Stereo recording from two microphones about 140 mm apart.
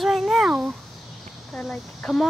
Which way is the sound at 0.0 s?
Centre (ahead or behind).